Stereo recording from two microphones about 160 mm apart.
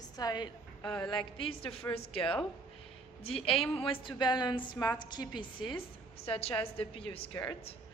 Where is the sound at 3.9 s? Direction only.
30° left (ahead or behind).